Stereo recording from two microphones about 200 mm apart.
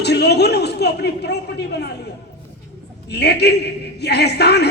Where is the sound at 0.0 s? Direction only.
55° left (ahead or behind).